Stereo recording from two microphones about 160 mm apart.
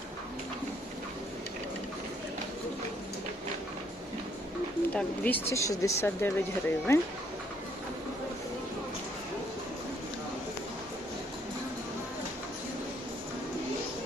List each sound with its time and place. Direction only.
4.9 s speech: 10° left (ahead or behind)